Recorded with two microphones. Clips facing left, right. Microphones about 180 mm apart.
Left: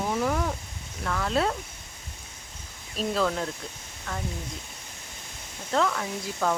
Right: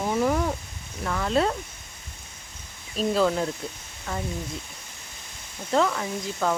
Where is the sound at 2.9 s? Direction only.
Centre (ahead or behind).